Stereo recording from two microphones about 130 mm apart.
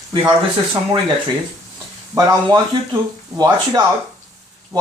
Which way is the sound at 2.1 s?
25° right (ahead or behind).